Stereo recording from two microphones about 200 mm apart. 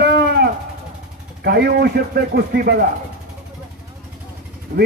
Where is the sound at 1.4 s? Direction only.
50° right (ahead or behind).